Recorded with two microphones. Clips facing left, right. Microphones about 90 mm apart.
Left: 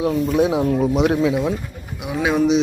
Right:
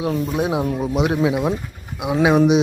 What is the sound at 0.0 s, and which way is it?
Speech, 20° right (ahead or behind).